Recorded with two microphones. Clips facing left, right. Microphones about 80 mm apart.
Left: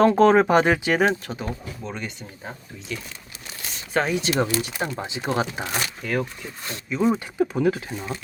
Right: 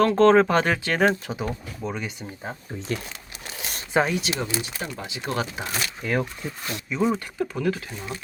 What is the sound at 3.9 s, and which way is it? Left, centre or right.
Speech, centre.